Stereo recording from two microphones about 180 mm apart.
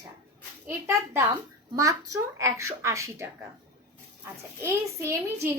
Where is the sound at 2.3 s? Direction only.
15° right (ahead or behind).